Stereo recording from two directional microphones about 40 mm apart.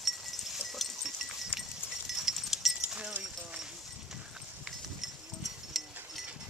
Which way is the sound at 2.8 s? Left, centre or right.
Right.